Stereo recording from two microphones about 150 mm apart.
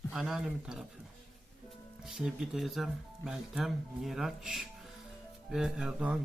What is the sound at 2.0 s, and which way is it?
Speech, 5° right (ahead or behind).